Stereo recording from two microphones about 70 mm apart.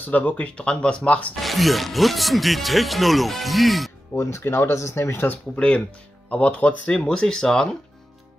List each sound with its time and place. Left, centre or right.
0.0 s speech: left
1.3 s speech: centre
4.1 s speech: left; by 7.7 s centre